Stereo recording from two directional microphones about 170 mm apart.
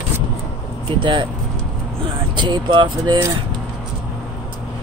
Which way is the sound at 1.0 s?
30° right (ahead or behind).